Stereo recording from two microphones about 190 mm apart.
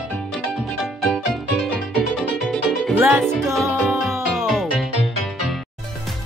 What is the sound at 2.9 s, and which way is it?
Music, 10° right (ahead or behind).